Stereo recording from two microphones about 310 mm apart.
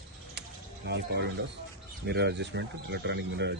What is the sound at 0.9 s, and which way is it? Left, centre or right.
Speech, right.